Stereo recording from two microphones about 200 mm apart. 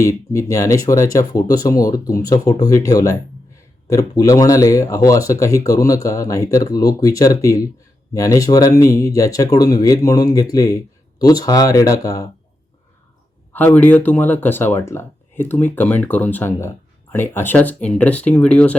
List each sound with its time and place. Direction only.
0.0 s speech: 15° left (ahead or behind)
13.5 s speech: 10° left (ahead or behind)